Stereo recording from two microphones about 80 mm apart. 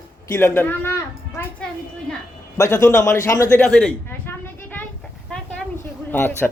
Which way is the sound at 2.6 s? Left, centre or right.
Left.